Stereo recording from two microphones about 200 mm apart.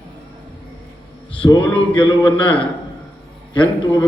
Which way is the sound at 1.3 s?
25° left (ahead or behind).